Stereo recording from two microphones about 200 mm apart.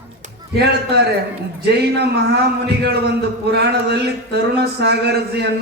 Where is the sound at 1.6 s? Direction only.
55° right (ahead or behind).